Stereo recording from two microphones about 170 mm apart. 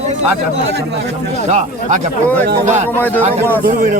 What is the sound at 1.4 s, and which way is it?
Speech, 45° right (ahead or behind).